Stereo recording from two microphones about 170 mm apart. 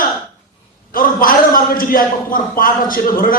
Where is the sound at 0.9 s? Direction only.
55° left (ahead or behind).